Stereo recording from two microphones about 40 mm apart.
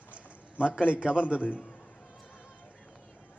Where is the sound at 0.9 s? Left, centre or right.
Right.